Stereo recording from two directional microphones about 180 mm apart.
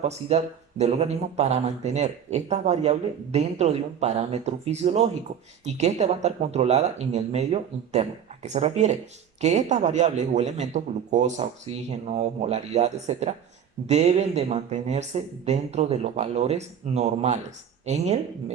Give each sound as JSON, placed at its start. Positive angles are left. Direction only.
{"t": 0.0, "sound": "a man's voice", "side_deg": -35}